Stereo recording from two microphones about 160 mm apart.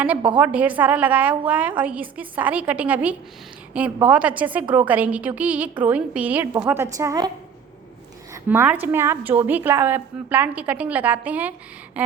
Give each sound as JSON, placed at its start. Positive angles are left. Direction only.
{"t": 0.3, "sound": "a woman's voice", "side_deg": -10}
{"t": 8.3, "sound": "a woman's voice", "side_deg": -15}